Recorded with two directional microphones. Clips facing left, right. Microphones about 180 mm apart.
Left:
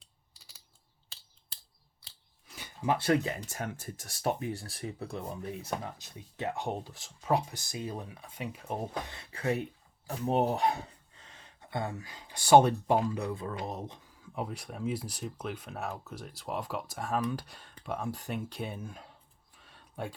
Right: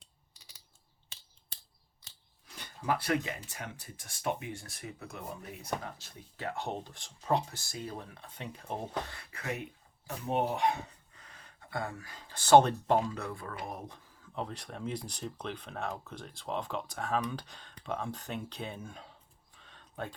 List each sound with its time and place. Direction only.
2.5 s a sound: 5° left (ahead or behind)
2.8 s speech: 25° left (ahead or behind)
3.2 s speech: 40° left (ahead or behind)
6.0 s speech: 20° left (ahead or behind)
9.0 s speech: 25° left (ahead or behind)
14.3 s speech: 10° left (ahead or behind)
19.6 s a sound: 10° left (ahead or behind)